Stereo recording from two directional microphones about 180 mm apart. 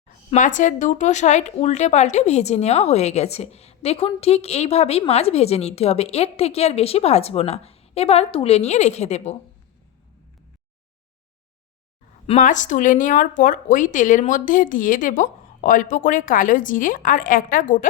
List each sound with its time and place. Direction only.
0.3 s a woman's voice: 45° left (ahead or behind)
12.2 s speech: 40° left (ahead or behind)